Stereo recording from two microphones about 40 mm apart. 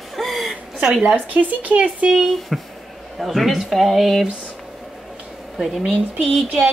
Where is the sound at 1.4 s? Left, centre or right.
Right.